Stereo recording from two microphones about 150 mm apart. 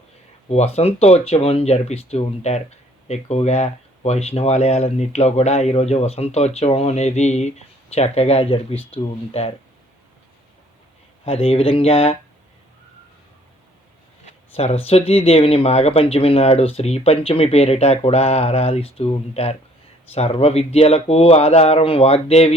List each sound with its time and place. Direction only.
0.4 s speech: 45° left (ahead or behind)
11.3 s speech: 40° left (ahead or behind)
14.3 s a sound: 45° left (ahead or behind)
14.8 s speech: 40° left (ahead or behind)